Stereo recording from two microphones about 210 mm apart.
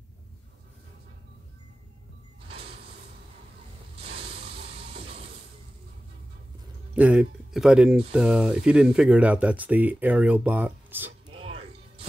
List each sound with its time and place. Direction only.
2.4 s sliding door: 30° right (ahead or behind)
4.0 s mechanisms: 30° right (ahead or behind)
7.0 s speech: 5° right (ahead or behind)
11.2 s music: 25° right (ahead or behind)